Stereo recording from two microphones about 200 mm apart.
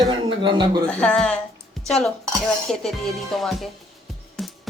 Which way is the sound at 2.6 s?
Centre (ahead or behind).